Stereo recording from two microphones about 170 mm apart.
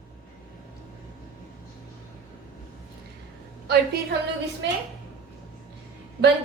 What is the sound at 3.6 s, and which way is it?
Speech, 70° right (ahead or behind).